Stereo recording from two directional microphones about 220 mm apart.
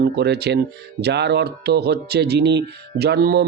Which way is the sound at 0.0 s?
50° right (ahead or behind).